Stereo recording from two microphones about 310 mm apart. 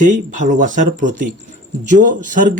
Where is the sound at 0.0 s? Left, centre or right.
Right.